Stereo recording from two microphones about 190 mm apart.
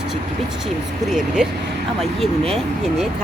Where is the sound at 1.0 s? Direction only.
5° right (ahead or behind).